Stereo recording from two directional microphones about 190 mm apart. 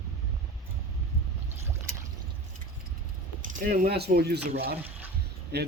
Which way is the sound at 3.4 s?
45° right (ahead or behind).